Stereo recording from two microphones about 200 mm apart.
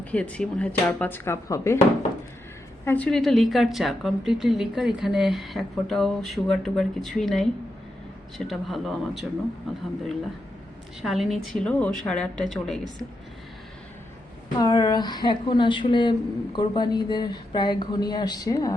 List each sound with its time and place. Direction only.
0.0 s speech: 5° left (ahead or behind)
2.8 s a woman's voice: 10° left (ahead or behind)
11.0 s a woman's voice: centre (ahead or behind)
14.6 s a woman's voice: 20° left (ahead or behind)